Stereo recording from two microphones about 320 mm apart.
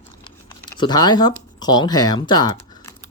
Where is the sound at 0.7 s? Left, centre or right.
Centre.